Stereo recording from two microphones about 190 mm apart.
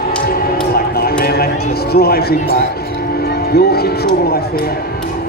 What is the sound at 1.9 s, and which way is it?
Music, 55° left (ahead or behind).